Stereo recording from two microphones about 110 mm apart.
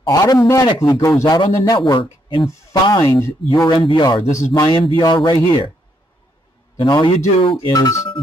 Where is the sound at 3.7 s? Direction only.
45° left (ahead or behind).